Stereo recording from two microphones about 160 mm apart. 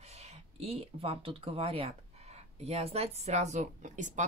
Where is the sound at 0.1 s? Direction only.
40° right (ahead or behind).